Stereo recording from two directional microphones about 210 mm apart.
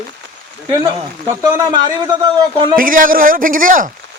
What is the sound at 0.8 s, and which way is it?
A man's voice, 20° right (ahead or behind).